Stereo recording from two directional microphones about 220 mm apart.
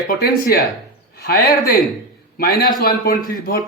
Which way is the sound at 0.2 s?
45° left (ahead or behind).